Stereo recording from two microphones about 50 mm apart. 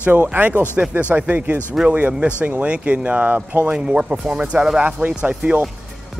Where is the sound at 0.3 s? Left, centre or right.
Right.